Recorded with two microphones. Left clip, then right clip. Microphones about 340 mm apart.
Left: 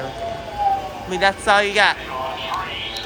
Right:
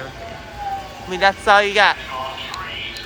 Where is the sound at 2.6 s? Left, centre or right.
Left.